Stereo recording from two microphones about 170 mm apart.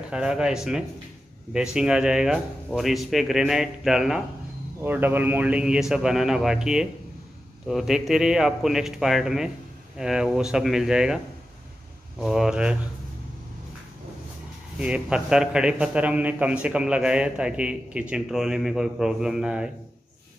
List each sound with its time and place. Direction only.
0.1 s a man's voice: 5° right (ahead or behind)
12.2 s a man's voice: 5° right (ahead or behind)
14.8 s a man's voice: 5° right (ahead or behind)